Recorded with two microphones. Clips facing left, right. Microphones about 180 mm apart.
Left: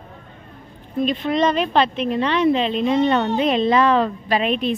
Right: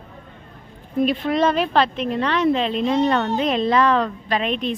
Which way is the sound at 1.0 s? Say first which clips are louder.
Even; 5° right (ahead or behind).